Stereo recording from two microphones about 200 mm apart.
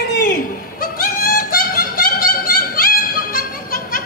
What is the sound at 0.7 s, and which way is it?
Yodeling, 45° left (ahead or behind).